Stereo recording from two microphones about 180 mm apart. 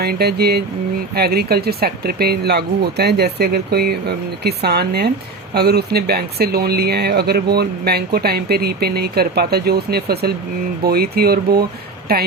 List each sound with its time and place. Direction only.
0.0 s speech: 60° right (ahead or behind)